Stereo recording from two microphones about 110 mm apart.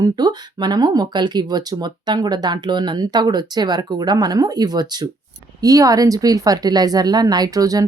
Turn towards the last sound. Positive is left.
turn(degrees=-35)  # may be behind; listen again after turning